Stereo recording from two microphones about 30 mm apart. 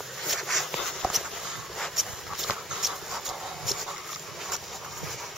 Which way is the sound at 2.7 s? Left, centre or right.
Centre.